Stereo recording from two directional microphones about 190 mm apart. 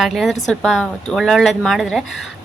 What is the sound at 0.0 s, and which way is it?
A woman's voice, centre (ahead or behind).